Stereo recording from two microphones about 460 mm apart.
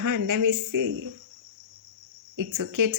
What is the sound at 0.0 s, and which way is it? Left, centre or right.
Speech, right.